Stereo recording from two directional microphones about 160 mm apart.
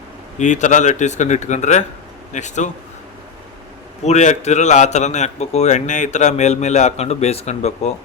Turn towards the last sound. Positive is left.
turn(degrees=40)  # may be behind; listen again after turning